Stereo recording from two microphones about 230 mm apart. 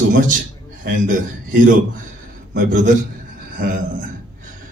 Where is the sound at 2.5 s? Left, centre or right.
Right.